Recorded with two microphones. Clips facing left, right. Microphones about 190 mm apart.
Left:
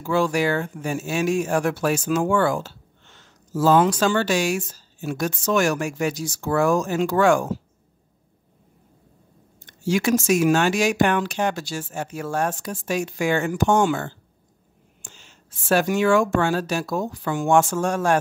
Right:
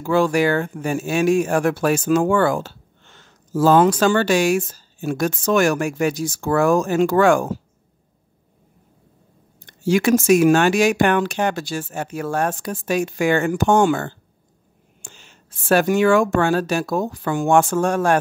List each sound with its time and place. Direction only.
0.0 s speech: 55° right (ahead or behind)
9.7 s speech: 55° right (ahead or behind)